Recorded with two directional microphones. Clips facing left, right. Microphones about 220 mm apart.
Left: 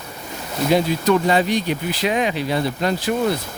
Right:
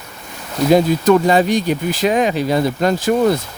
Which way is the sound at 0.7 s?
45° right (ahead or behind).